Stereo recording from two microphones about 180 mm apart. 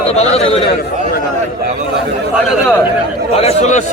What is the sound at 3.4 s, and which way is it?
Speech, 40° left (ahead or behind).